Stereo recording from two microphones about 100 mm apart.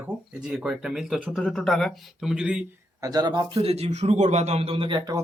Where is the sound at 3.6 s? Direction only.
90° right.